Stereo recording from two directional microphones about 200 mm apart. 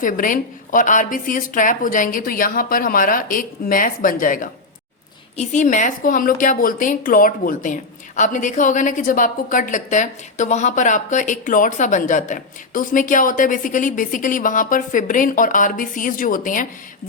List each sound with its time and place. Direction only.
0.0 s a woman's voice: 40° left (ahead or behind)